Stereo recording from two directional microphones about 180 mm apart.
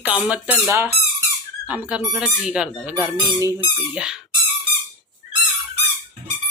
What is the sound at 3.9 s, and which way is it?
Speech, 5° right (ahead or behind).